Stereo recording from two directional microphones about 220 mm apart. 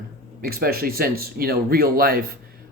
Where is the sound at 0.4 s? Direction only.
45° right (ahead or behind).